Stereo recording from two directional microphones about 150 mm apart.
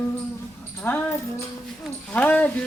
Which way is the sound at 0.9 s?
15° left (ahead or behind).